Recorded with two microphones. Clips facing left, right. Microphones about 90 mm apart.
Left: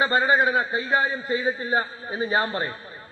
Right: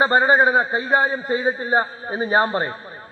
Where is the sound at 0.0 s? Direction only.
30° right (ahead or behind).